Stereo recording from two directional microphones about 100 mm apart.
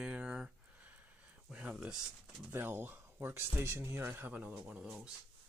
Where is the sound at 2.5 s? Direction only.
20° right (ahead or behind).